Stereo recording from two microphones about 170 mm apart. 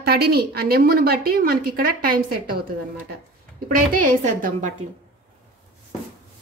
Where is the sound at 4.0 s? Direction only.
50° right (ahead or behind).